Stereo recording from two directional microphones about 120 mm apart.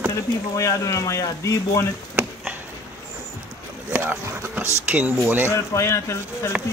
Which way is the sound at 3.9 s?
20° right (ahead or behind).